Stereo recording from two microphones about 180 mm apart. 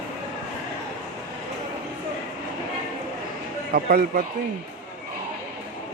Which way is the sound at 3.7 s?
55° right (ahead or behind).